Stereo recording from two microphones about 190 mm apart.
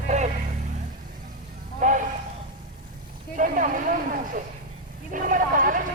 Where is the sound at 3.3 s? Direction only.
45° right (ahead or behind).